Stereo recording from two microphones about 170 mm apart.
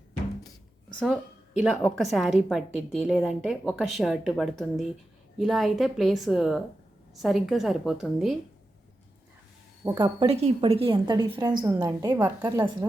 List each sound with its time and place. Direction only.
0.9 s a woman's voice: 5° left (ahead or behind)
9.8 s a woman's voice: 20° right (ahead or behind)
10.2 s a woman's voice: 35° right (ahead or behind); by 12.9 s 20° right (ahead or behind)